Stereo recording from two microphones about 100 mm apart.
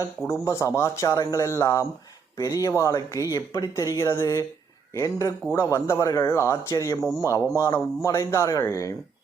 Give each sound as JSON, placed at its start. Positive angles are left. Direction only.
{"t": 0.4, "sound": "speech", "side_deg": 30}